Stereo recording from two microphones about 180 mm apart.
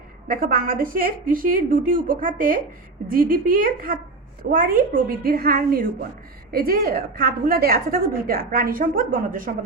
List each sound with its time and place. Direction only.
0.3 s a woman's voice: 50° right (ahead or behind)